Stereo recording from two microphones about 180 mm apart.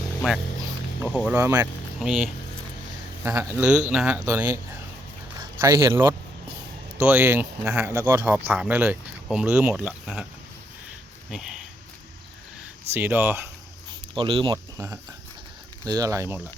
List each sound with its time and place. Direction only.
1.2 s speech: 10° right (ahead or behind)
2.0 s speech: centre (ahead or behind)
11.3 s speech: centre (ahead or behind)
12.9 s speech: 10° right (ahead or behind)
14.2 s speech: 30° right (ahead or behind)
15.8 s speech: 20° right (ahead or behind)